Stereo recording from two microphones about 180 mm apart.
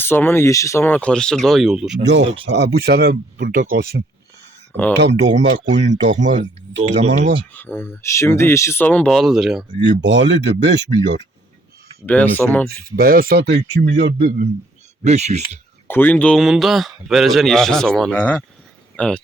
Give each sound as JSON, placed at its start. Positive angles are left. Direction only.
{"t": 0.0, "sound": "speech", "side_deg": 10}
{"t": 2.0, "sound": "speech", "side_deg": -75}
{"t": 4.9, "sound": "speech", "side_deg": -75}
{"t": 6.2, "sound": "speech", "side_deg": -45}
{"t": 7.5, "sound": "speech", "side_deg": 10}
{"t": 9.8, "sound": "speech", "side_deg": -80}
{"t": 12.0, "sound": "speech", "side_deg": 10}
{"t": 12.6, "sound": "speech", "side_deg": -55}
{"t": 15.0, "sound": "speech", "side_deg": -40}
{"t": 15.9, "sound": "speech", "side_deg": 10}